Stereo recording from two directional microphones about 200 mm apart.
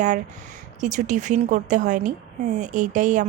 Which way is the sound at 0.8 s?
40° right (ahead or behind).